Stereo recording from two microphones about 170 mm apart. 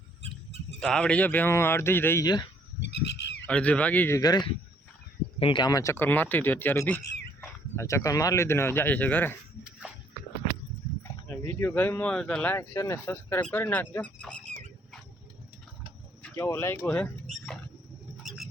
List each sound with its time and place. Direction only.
0.8 s speech: 5° left (ahead or behind); by 2.5 s 25° left (ahead or behind)
2.8 s bird: 90° left
3.4 s speech: 5° left (ahead or behind)
4.2 s speech: 25° left (ahead or behind)
11.4 s speech: 10° left (ahead or behind)
13.9 s fowl: 10° left (ahead or behind)
16.2 s speech: 15° left (ahead or behind)
18.2 s a sound: centre (ahead or behind)